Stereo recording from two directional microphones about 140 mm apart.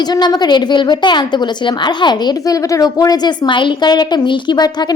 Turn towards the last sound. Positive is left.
turn(degrees=30)  # may be behind; listen again after turning